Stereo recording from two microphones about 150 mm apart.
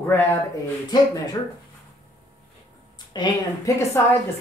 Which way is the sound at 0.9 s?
25° left (ahead or behind).